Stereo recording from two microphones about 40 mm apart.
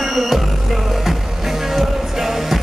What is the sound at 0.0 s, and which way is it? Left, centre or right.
Music, centre.